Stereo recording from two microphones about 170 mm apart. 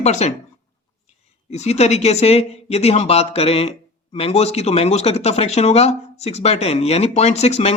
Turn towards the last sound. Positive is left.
turn(degrees=40)  # may be behind; listen again after turning